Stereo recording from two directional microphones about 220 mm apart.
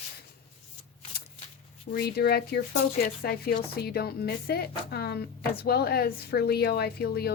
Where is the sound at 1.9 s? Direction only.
45° left (ahead or behind).